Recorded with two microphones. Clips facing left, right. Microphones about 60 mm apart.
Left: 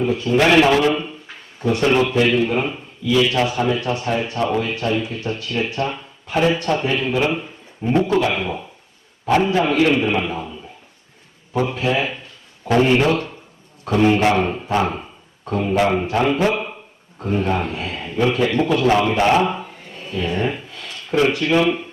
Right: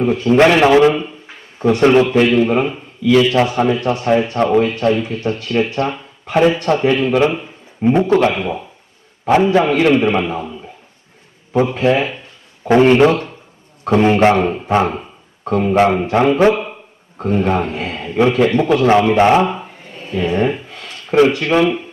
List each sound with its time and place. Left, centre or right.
0.0 s speech: right
9.6 s speech: right
11.7 s speech: right
15.4 s a man's voice: right
20.0 s a sound: right